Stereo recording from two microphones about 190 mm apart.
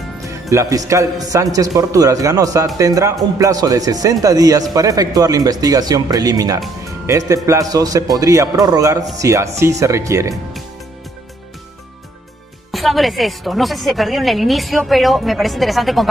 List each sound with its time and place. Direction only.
0.2 s a man's voice: 15° right (ahead or behind)
6.8 s music: 15° right (ahead or behind)
7.4 s a man's voice: 20° right (ahead or behind)
12.7 s a woman's voice: centre (ahead or behind)